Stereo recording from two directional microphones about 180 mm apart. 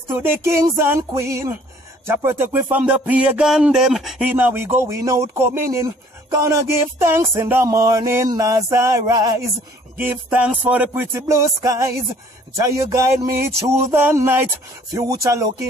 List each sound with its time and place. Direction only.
0.2 s music: 15° right (ahead or behind)
9.9 s music: 10° right (ahead or behind)